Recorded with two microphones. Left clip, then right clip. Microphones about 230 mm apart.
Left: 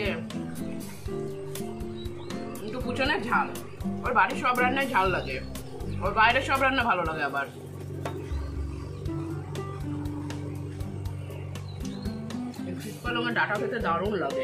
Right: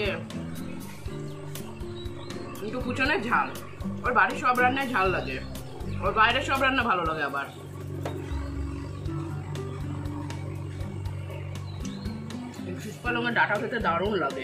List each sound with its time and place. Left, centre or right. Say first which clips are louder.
2.9 s speech: right 1 dB; centre
13.0 s speech: right 2 dB; centre